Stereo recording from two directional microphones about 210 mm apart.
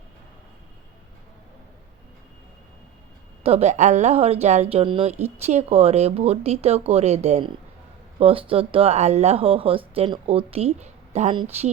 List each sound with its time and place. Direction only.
3.4 s a woman's voice: 30° right (ahead or behind)